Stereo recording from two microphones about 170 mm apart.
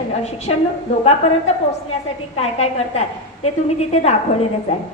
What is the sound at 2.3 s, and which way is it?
A woman's voice, 40° left (ahead or behind).